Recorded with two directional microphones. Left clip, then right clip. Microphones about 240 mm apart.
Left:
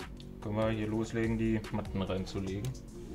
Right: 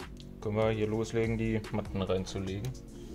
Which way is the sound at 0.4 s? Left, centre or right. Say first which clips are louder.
Right 4 dB; right.